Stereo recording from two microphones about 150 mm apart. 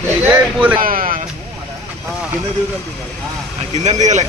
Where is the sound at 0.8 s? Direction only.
70° right (ahead or behind).